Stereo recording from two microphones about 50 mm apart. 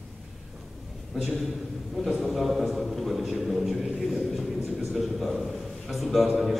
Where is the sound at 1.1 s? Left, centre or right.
Centre.